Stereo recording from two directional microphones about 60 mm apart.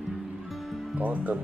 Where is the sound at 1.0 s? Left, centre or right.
Right.